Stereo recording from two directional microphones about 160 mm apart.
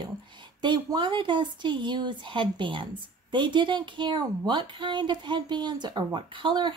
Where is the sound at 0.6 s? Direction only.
30° right (ahead or behind).